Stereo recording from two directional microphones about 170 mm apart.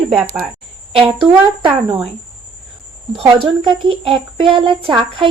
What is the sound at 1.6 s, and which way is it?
Speech, 30° right (ahead or behind).